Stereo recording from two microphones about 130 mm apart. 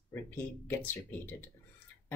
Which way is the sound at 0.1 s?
15° left (ahead or behind).